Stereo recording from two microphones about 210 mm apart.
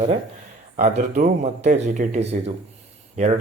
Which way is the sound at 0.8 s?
35° right (ahead or behind).